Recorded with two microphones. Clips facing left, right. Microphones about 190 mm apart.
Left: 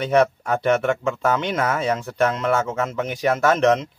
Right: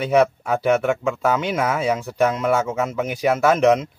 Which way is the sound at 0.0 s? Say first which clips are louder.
Right 1 dB; 5° right (ahead or behind).